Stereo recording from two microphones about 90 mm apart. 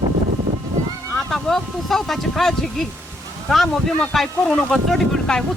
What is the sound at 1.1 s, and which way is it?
Speech, 5° left (ahead or behind).